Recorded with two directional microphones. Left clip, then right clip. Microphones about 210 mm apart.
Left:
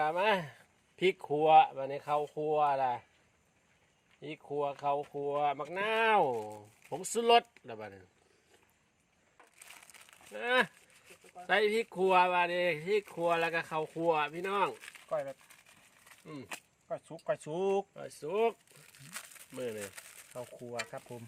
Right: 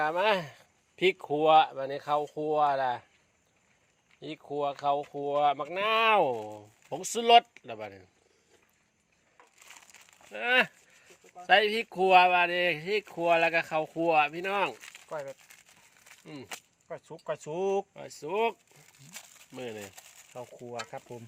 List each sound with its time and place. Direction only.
0.0 s speech: 30° right (ahead or behind)
4.2 s speech: 35° right (ahead or behind)
9.6 s crumpling: 5° right (ahead or behind)
10.3 s speech: 35° right (ahead or behind); by 17.8 s 15° right (ahead or behind)
17.9 s speech: 30° right (ahead or behind)
19.5 s speech: 30° right (ahead or behind)
20.0 s crumpling: 5° right (ahead or behind)